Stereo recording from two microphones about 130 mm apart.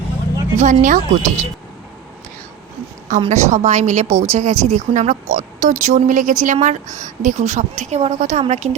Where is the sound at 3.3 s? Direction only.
60° right (ahead or behind); by 6.5 s 80° right.